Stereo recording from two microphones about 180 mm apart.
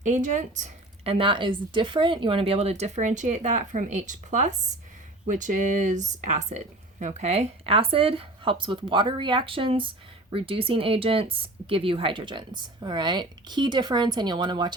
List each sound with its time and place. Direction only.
0.0 s speech: 45° right (ahead or behind)
1.1 s speech: 30° right (ahead or behind)